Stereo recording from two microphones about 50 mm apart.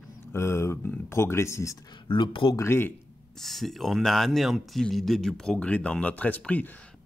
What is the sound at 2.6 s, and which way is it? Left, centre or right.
Speech, left.